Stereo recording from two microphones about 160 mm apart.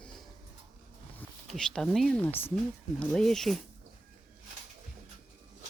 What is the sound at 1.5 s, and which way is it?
Speech, centre (ahead or behind).